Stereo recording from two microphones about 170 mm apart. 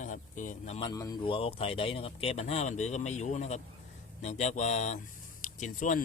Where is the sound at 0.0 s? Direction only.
50° left (ahead or behind).